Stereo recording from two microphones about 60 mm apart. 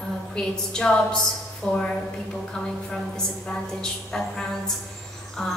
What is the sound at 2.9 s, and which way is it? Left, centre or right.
A woman's voice, centre.